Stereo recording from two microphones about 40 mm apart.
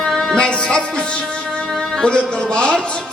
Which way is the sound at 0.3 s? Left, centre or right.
Left.